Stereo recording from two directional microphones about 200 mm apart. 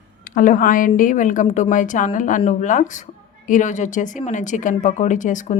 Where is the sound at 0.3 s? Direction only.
40° left (ahead or behind).